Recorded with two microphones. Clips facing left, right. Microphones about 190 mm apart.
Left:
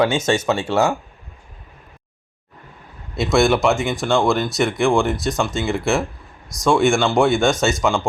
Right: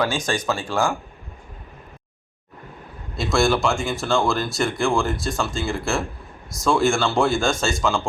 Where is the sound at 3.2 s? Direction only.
20° left (ahead or behind).